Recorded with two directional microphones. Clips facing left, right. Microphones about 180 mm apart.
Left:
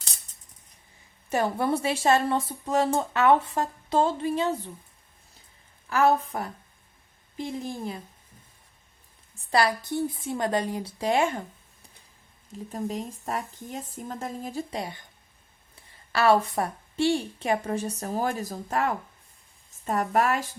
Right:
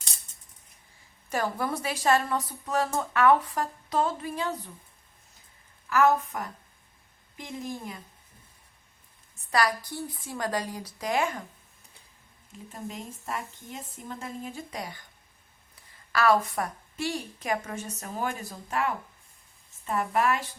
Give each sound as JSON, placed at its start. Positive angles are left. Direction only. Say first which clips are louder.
{"t": 1.3, "sound": "a woman's voice", "louder": "left 4 dB", "side_deg": 25}
{"t": 5.9, "sound": "a woman's voice", "louder": "left 1 dB", "side_deg": 30}
{"t": 9.5, "sound": "a woman's voice", "louder": "left 3 dB", "side_deg": 25}
{"t": 12.7, "sound": "a woman's voice", "louder": "left 7 dB", "side_deg": 40}